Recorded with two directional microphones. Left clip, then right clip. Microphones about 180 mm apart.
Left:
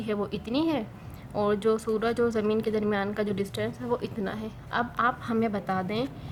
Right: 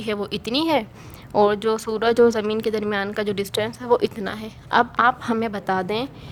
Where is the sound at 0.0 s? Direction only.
50° right (ahead or behind).